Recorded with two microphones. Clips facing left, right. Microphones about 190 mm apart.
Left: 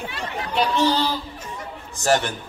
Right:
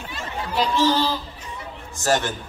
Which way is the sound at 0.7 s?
20° left (ahead or behind).